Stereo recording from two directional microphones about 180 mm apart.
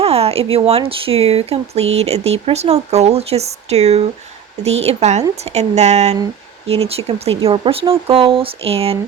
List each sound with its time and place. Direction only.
0.0 s speech: 35° right (ahead or behind)